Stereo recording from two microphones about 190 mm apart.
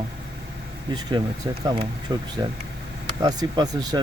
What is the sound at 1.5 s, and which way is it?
Speech, 20° right (ahead or behind).